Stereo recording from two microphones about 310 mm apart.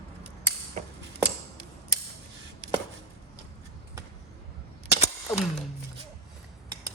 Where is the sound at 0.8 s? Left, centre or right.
Right.